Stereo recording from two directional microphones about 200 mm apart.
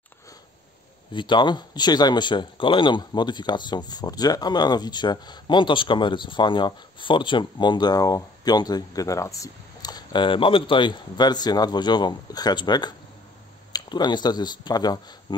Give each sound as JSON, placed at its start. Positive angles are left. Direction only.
{"t": 1.1, "sound": "speech", "side_deg": 25}